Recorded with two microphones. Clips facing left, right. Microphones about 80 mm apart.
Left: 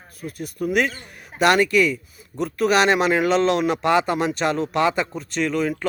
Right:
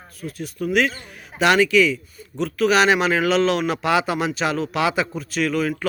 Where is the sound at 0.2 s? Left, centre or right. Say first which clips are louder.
Even; centre.